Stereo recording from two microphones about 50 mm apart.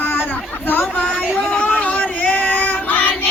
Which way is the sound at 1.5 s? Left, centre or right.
Left.